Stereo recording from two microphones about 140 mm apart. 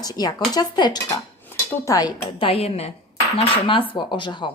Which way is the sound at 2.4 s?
45° left (ahead or behind).